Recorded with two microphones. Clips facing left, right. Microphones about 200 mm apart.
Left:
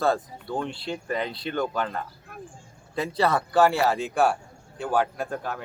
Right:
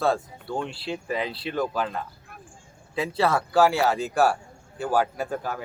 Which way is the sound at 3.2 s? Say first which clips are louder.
Even; centre (ahead or behind).